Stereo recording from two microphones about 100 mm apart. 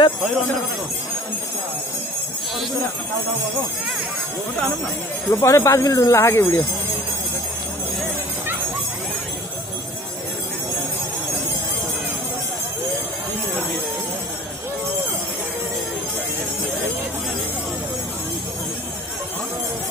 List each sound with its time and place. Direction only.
5.3 s speech: 30° left (ahead or behind)